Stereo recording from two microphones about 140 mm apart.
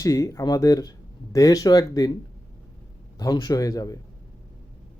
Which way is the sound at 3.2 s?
25° left (ahead or behind).